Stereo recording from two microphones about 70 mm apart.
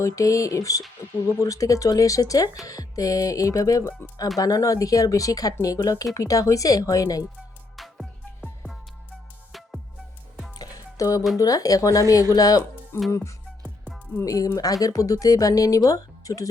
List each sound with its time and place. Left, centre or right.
0.0 s speech: left
1.0 s a sound: left
1.4 s speech: left
7.8 s music: centre
9.5 s music: centre
10.6 s music: left
11.3 s speech: left
13.1 s speech: left
14.3 s speech: left